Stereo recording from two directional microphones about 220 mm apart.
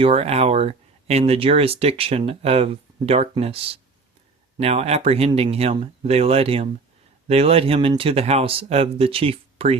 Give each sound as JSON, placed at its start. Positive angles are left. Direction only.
{"t": 0.0, "sound": "speech", "side_deg": -25}